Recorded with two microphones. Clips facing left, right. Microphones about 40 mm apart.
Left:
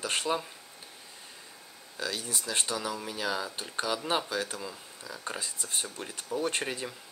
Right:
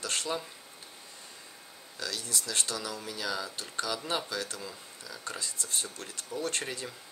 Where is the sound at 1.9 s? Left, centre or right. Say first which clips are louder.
Left 2 dB; centre.